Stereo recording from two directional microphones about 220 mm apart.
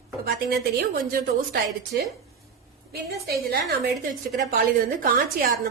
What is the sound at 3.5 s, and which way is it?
A woman's voice, 45° right (ahead or behind).